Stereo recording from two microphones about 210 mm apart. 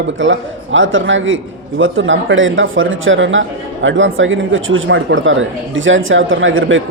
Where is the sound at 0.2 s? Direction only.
65° right (ahead or behind).